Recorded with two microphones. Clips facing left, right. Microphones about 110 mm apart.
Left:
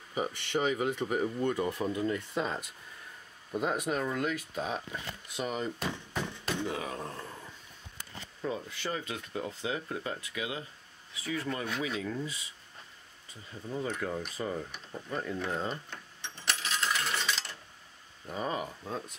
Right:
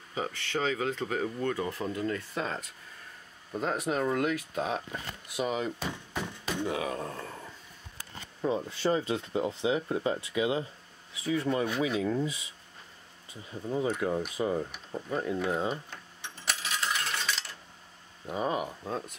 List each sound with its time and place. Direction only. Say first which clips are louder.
0.1 s speech: left 1 dB; 15° left (ahead or behind)
3.5 s speech: right 1 dB; 5° left (ahead or behind)
8.4 s speech: right 6 dB; 25° right (ahead or behind); by 16.9 s 5° right (ahead or behind)
17.4 s a sound: left 1 dB; centre (ahead or behind)
18.2 s speech: right 4 dB; 10° right (ahead or behind)